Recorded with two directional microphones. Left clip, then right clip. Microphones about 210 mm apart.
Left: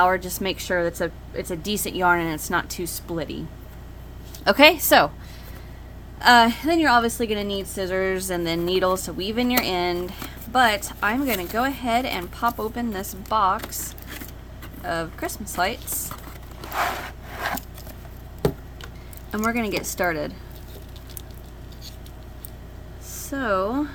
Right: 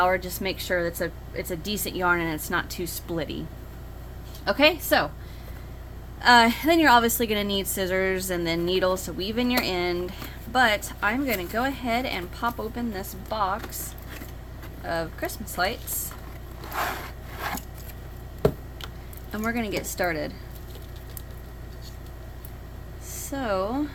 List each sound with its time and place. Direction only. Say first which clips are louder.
0.0 s a woman's voice: left 3 dB; 15° left (ahead or behind)
4.4 s a woman's voice: left 6 dB; 30° left (ahead or behind)
6.1 s a woman's voice: left 2 dB; 15° left (ahead or behind)
14.8 s a woman's voice: left 2 dB; 20° left (ahead or behind)
19.3 s a woman's voice: left 4 dB; 20° left (ahead or behind)
23.3 s a woman's voice: left 4 dB; 15° left (ahead or behind)